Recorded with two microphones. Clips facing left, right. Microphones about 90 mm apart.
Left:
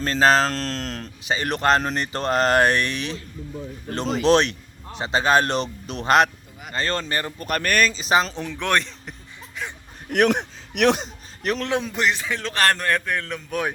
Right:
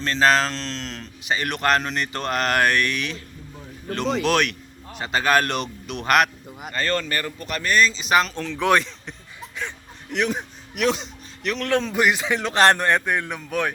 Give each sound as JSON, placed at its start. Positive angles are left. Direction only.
{"t": 0.0, "sound": "a man's voice", "side_deg": 35}
{"t": 7.3, "sound": "speech", "side_deg": 45}
{"t": 8.5, "sound": "a man's voice", "side_deg": 0}
{"t": 10.1, "sound": "speech", "side_deg": 60}
{"t": 11.0, "sound": "a sound", "side_deg": 40}
{"t": 11.6, "sound": "speech", "side_deg": 15}
{"t": 11.9, "sound": "speech", "side_deg": -10}